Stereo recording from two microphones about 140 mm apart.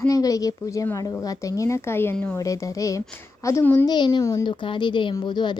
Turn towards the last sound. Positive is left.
turn(degrees=35)  # may be behind; listen again after turning